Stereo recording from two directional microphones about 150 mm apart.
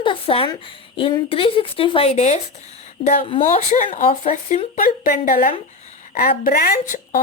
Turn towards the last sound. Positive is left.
turn(degrees=70)  # may be behind; listen again after turning